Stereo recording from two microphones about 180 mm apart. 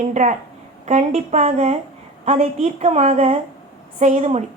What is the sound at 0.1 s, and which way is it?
A woman's voice, 45° right (ahead or behind).